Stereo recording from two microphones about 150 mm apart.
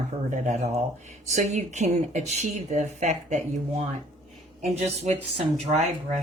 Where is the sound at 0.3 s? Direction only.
50° right (ahead or behind).